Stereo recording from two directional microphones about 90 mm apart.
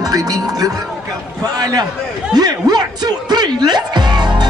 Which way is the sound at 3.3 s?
50° right (ahead or behind).